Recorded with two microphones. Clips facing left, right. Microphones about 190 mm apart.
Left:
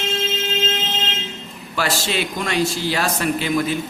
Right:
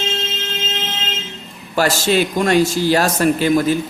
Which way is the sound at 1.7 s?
45° right (ahead or behind).